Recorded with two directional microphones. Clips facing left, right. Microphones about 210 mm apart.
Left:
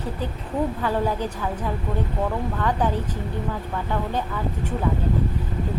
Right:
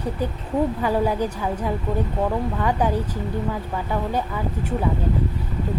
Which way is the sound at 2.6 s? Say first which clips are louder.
Right 1 dB; 10° right (ahead or behind).